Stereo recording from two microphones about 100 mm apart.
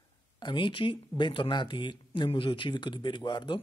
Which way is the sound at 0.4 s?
55° left (ahead or behind).